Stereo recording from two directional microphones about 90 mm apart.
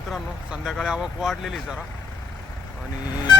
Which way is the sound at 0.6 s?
5° right (ahead or behind).